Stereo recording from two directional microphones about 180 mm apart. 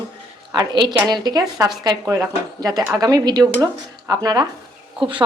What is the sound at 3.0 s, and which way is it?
Speech, 20° right (ahead or behind).